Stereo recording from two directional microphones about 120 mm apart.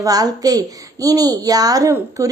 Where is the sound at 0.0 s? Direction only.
30° right (ahead or behind).